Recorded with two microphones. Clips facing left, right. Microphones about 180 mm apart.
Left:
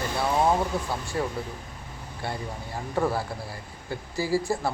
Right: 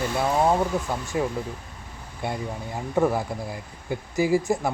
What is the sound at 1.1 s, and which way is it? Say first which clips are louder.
Speech: right 4 dB; 15° right (ahead or behind).